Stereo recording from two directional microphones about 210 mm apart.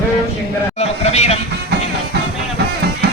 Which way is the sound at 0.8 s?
30° left (ahead or behind).